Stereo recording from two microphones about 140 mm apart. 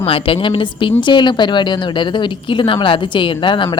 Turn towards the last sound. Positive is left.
turn(degrees=35)  # may be behind; listen again after turning